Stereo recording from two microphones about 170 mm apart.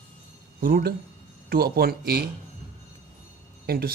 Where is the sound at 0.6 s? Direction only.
60° right (ahead or behind).